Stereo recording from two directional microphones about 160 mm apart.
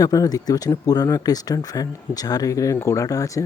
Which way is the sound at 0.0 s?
20° left (ahead or behind).